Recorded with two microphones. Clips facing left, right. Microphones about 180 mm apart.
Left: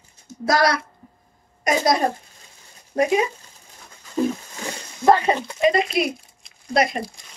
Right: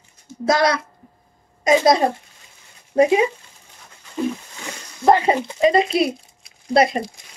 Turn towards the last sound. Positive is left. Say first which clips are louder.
# right 4 dB
turn(degrees=-30)  # may be behind; listen again after turning